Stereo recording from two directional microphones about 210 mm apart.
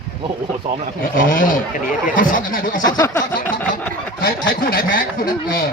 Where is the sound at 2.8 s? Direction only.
15° left (ahead or behind).